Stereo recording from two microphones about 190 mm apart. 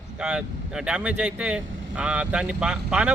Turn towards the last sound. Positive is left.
turn(degrees=-5)  # may be behind; listen again after turning